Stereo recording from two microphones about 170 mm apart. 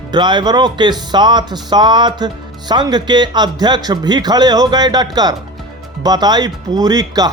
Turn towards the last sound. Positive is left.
turn(degrees=-25)  # may be behind; listen again after turning